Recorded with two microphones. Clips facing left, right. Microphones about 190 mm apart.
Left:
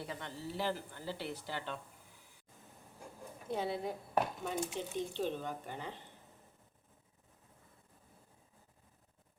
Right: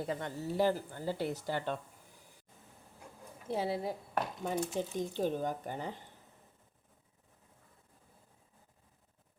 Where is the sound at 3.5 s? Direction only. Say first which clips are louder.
Right 3 dB; 30° right (ahead or behind).